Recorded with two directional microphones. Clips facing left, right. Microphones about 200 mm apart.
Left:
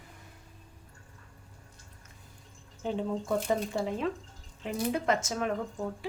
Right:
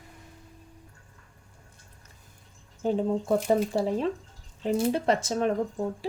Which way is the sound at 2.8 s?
35° right (ahead or behind).